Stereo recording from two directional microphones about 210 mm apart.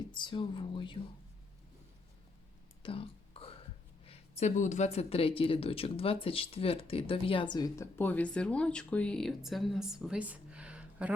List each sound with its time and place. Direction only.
0.1 s speech: 20° left (ahead or behind)
2.8 s whispering: 25° left (ahead or behind)
4.0 s speech: 30° left (ahead or behind); by 11.1 s 5° right (ahead or behind)